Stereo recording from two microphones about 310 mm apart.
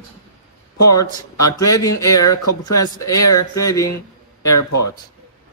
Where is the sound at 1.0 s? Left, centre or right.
Centre.